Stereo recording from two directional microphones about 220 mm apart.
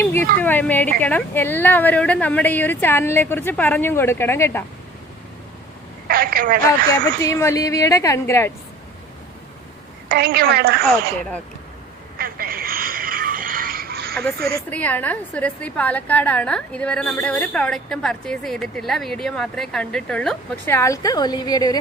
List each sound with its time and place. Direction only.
0.0 s a sound: 10° left (ahead or behind)
0.4 s a woman's voice: 10° left (ahead or behind)
6.1 s a woman's voice: 40° right (ahead or behind)
6.9 s a woman's voice: 15° left (ahead or behind)
10.1 s a woman's voice: 45° right (ahead or behind)
12.1 s a sound: 40° right (ahead or behind)
14.5 s a woman's voice: 5° left (ahead or behind)